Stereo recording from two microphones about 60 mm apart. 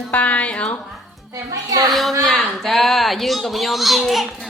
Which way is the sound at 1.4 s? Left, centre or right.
Right.